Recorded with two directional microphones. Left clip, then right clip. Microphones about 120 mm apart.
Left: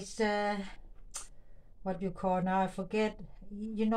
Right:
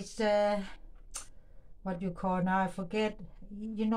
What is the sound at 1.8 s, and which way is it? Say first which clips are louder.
A woman's voice: left 1 dB; centre (ahead or behind).